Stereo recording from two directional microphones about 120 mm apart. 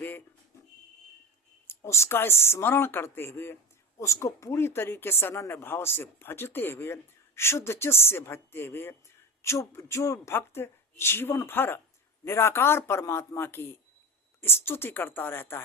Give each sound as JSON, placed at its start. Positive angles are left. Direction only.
{"t": 1.6, "sound": "speech", "side_deg": 20}